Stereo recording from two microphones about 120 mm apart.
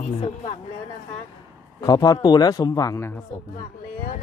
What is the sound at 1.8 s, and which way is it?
Speech, 35° left (ahead or behind).